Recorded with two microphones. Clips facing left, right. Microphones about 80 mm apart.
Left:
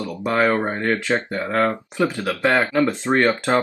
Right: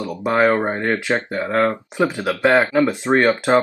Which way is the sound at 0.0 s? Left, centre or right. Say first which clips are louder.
Right 3 dB; right.